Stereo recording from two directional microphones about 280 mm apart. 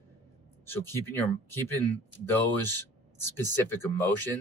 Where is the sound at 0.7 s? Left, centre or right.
Centre.